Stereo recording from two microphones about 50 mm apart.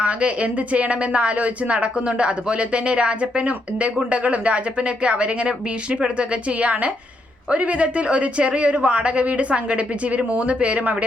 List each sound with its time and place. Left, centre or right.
0.0 s a woman's voice: right